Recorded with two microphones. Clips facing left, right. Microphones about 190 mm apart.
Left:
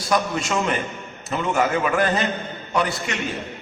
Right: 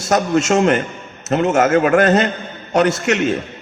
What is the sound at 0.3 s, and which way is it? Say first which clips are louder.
A man's voice: right 9 dB; 80° right.